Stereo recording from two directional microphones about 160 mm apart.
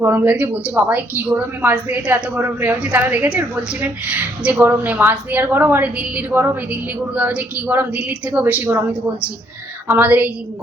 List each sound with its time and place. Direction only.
0.0 s a woman's voice: 15° right (ahead or behind)